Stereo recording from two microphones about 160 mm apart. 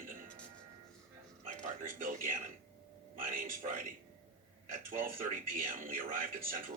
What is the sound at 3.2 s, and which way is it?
Speech, 60° right (ahead or behind).